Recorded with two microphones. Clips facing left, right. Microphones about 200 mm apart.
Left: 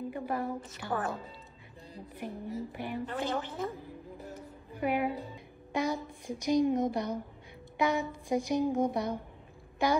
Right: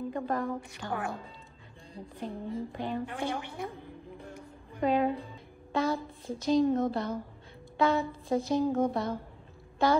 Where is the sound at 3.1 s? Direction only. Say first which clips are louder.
Left 1 dB; 15° right (ahead or behind).